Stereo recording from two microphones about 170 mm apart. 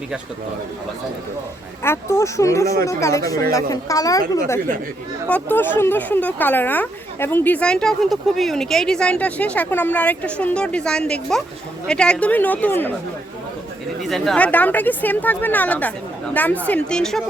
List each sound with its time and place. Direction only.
1.8 s a woman's voice: 15° left (ahead or behind)
5.3 s speech: 10° left (ahead or behind)
14.0 s a woman's voice: centre (ahead or behind)